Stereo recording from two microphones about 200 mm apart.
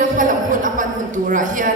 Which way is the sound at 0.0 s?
40° right (ahead or behind).